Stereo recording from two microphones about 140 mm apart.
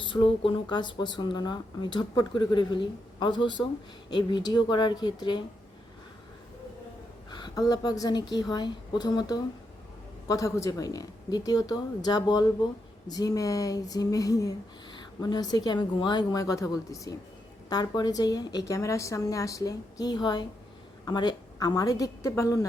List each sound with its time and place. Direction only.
0.0 s speech: 35° left (ahead or behind)
7.3 s a woman's voice: 30° left (ahead or behind)